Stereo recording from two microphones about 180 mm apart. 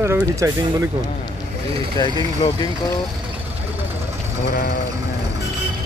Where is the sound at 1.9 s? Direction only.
25° left (ahead or behind).